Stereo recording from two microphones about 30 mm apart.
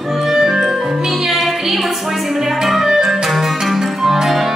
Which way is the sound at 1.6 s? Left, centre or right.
Centre.